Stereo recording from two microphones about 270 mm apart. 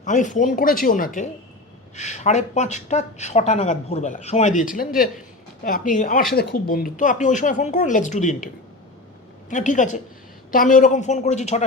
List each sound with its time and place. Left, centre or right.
0.0 s speech: left
9.5 s speech: left